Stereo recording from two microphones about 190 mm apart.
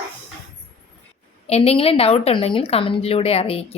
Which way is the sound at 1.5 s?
30° left (ahead or behind).